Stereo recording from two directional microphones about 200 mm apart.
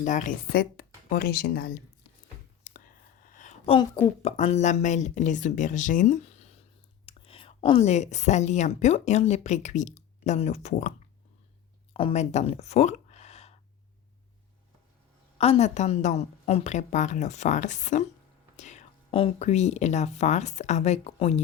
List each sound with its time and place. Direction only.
0.0 s a woman's voice: 40° left (ahead or behind)
2.7 s whispering: 40° left (ahead or behind)
3.3 s a sound: 40° left (ahead or behind)
4.2 s a woman's voice: 30° left (ahead or behind)
11.9 s a sound: 30° left (ahead or behind)
15.4 s a woman's voice: 30° left (ahead or behind)